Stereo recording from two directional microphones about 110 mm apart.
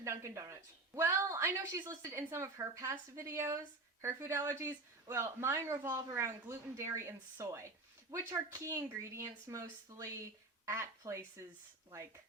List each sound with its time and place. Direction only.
0.0 s speech: 25° right (ahead or behind)